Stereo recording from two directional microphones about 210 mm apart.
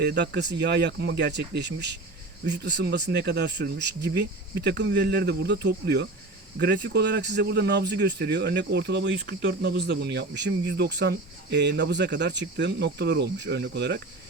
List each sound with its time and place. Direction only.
0.0 s a man's voice: 50° right (ahead or behind)